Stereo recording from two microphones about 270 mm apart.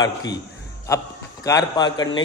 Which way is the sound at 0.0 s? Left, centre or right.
Left.